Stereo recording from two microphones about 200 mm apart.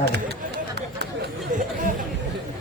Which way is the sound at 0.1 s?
55° right (ahead or behind).